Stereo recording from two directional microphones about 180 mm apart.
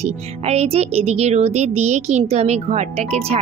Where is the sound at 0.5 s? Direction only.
35° right (ahead or behind).